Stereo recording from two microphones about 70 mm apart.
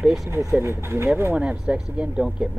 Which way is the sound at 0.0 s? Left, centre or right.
Centre.